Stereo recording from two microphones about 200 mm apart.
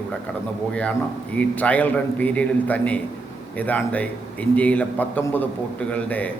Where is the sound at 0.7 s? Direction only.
5° left (ahead or behind).